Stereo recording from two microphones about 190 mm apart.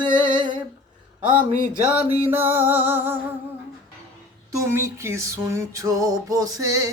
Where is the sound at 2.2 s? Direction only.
10° right (ahead or behind).